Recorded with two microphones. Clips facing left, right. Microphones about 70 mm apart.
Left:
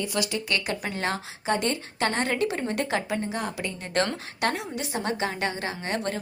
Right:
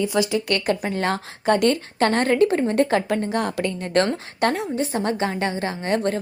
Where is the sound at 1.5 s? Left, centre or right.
Right.